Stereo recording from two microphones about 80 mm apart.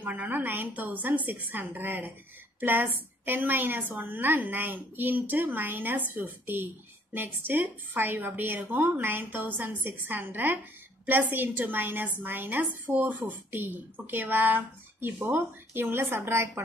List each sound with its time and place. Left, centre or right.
0.0 s a woman's voice: right